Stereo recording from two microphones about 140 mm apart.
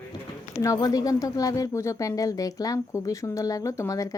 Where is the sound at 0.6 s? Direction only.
25° left (ahead or behind).